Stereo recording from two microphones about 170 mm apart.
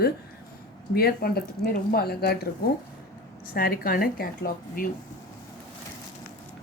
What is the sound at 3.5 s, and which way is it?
Speech, 60° left (ahead or behind).